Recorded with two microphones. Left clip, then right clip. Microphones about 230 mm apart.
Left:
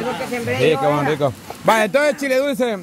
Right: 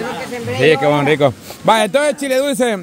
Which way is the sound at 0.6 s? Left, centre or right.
Right.